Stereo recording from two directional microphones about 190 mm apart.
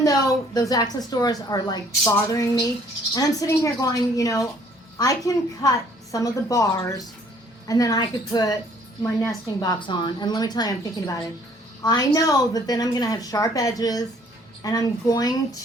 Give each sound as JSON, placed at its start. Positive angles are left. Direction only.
{"t": 0.0, "sound": "a woman's voice", "side_deg": 20}